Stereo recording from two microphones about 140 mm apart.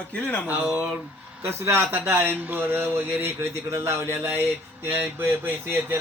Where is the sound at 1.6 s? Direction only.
15° right (ahead or behind).